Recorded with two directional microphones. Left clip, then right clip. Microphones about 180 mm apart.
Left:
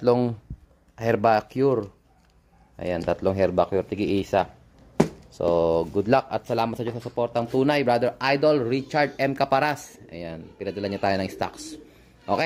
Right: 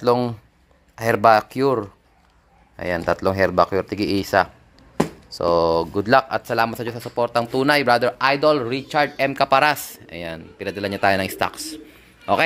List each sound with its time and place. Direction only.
0.0 s speech: 15° left (ahead or behind); by 11.7 s centre (ahead or behind)